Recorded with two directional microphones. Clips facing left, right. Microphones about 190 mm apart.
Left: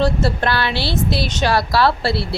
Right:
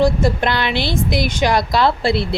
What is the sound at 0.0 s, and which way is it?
A woman's voice, 15° right (ahead or behind).